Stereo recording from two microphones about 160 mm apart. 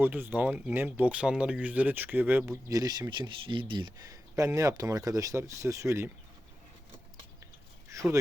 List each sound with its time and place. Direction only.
0.0 s speech: 10° right (ahead or behind)
7.9 s speech: 20° right (ahead or behind)